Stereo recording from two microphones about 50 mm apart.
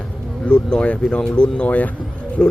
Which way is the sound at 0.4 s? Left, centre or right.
Centre.